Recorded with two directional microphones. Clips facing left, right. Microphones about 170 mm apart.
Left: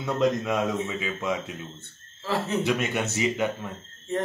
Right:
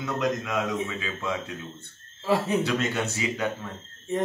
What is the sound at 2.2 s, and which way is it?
Speech, 15° right (ahead or behind).